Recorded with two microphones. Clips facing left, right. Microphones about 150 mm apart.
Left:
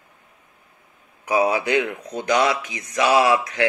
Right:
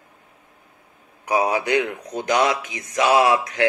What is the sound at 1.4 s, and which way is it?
Speech, 45° right (ahead or behind).